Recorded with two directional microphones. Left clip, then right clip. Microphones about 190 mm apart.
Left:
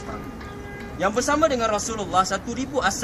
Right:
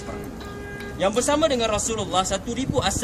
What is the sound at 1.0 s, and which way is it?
A man's voice, 15° right (ahead or behind).